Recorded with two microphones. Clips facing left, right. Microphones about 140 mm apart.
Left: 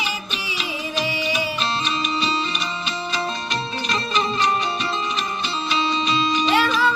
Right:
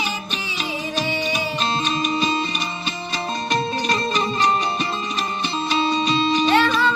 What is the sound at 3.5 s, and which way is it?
Music, 40° right (ahead or behind).